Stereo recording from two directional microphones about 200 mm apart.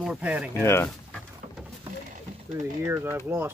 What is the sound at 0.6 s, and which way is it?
Speech, 10° left (ahead or behind).